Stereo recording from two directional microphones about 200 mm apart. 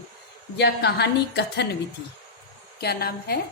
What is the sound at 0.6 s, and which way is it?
A woman's voice, 60° left (ahead or behind).